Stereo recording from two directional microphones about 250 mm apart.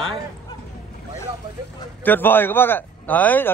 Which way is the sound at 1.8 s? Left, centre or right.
Centre.